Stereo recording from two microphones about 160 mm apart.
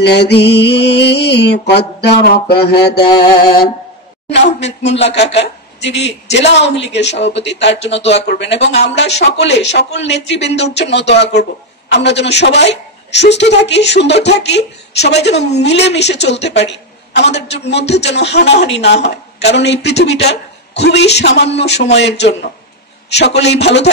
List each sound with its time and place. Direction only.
0.0 s a woman's voice: 90° left